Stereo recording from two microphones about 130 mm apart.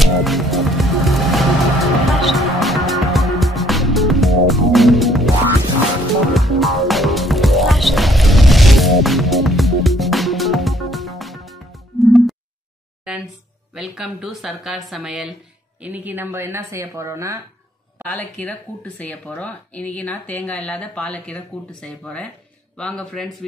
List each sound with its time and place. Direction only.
0.0 s music: centre (ahead or behind)
6.3 s music: centre (ahead or behind)
13.7 s speech: 5° right (ahead or behind)
15.8 s a woman's voice: 15° right (ahead or behind)
18.0 s speech: 10° left (ahead or behind)